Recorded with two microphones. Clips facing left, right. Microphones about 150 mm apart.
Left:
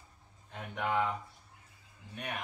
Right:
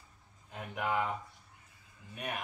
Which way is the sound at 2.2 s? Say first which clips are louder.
Right 1 dB; 5° right (ahead or behind).